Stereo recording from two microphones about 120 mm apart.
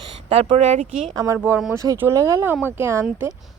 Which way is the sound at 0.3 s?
50° right (ahead or behind).